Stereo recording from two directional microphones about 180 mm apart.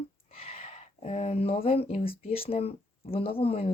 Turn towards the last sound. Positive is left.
turn(degrees=30)  # may be behind; listen again after turning